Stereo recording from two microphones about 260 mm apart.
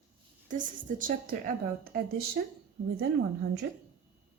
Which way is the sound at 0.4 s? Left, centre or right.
Right.